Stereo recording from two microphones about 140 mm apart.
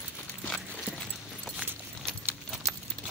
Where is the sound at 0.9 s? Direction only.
10° right (ahead or behind).